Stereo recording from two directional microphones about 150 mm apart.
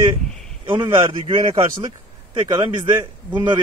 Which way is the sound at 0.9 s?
35° right (ahead or behind).